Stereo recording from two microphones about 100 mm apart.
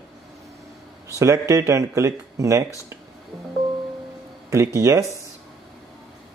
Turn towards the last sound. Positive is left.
turn(degrees=-30)  # may be behind; listen again after turning